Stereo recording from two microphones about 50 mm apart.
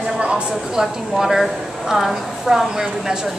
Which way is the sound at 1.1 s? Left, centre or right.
Centre.